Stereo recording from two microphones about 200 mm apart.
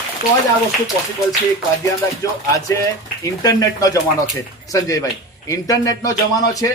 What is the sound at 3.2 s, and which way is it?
A man's voice, 15° left (ahead or behind).